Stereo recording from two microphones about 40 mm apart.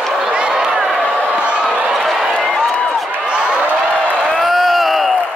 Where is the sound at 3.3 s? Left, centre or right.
Right.